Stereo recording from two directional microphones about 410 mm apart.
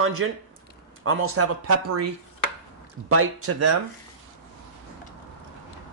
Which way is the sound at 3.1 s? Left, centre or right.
Right.